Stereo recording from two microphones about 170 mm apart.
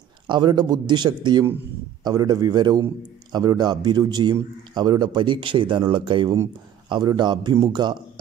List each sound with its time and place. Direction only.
0.3 s a man's voice: 25° right (ahead or behind)